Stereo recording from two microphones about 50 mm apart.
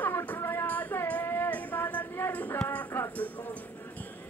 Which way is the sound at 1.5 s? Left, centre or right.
Left.